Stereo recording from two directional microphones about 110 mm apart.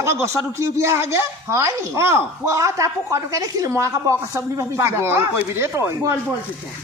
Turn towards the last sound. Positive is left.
turn(degrees=-25)  # may be behind; listen again after turning